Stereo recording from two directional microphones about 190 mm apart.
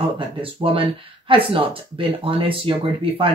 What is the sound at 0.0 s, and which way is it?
Speech, 30° right (ahead or behind).